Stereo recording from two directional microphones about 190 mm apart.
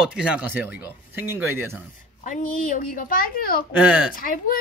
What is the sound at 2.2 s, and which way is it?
A woman's voice, 45° left (ahead or behind).